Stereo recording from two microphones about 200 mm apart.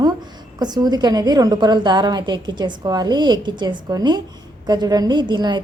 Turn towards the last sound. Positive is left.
turn(degrees=-20)  # may be behind; listen again after turning